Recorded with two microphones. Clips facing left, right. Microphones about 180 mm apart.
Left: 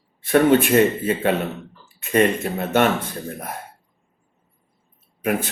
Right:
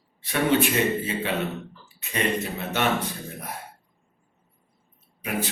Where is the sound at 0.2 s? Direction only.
50° left (ahead or behind).